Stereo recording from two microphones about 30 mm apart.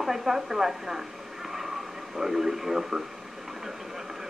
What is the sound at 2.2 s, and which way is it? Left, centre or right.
Speech, centre.